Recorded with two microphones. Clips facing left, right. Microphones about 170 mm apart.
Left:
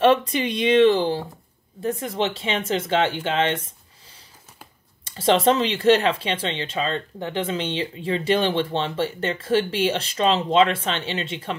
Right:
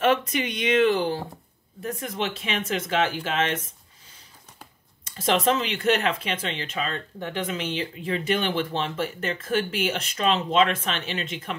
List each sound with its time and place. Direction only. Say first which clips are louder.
0.0 s speech: left 4 dB; 30° left (ahead or behind)
5.0 s speech: left 4 dB; 30° left (ahead or behind)